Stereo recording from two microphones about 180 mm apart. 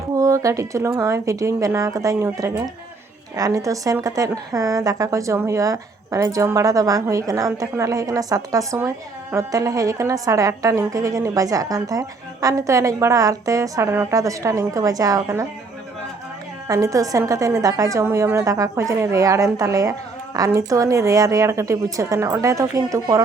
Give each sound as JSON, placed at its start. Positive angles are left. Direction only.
{"t": 0.2, "sound": "a woman's voice", "side_deg": -15}
{"t": 16.6, "sound": "a woman's voice", "side_deg": -20}